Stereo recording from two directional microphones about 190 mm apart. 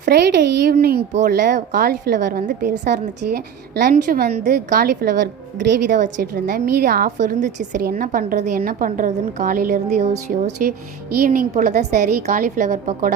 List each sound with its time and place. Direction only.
0.0 s a woman's voice: 60° right (ahead or behind)
5.9 s a woman's voice: 45° right (ahead or behind)
10.4 s a woman's voice: 50° right (ahead or behind)